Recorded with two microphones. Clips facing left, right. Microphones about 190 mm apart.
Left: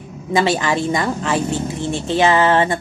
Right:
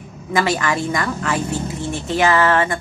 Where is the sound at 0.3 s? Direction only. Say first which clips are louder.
Left 2 dB; 20° left (ahead or behind).